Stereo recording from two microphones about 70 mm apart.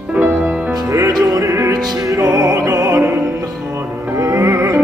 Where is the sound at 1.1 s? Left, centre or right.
Right.